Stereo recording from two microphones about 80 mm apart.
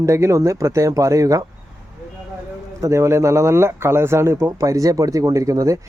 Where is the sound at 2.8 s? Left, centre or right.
Right.